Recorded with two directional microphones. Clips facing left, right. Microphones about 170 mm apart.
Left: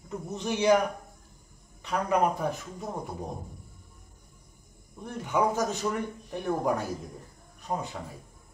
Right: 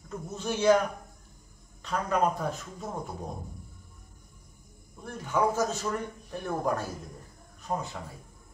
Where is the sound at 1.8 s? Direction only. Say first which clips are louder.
Left 1 dB; 15° left (ahead or behind).